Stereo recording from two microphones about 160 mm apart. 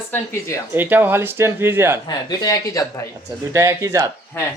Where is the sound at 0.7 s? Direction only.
10° right (ahead or behind).